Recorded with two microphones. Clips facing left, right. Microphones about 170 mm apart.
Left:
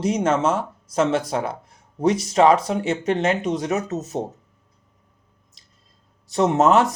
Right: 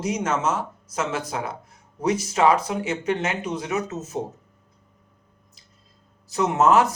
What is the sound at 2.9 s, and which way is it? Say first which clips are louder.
Speech: left 5 dB; 35° left (ahead or behind).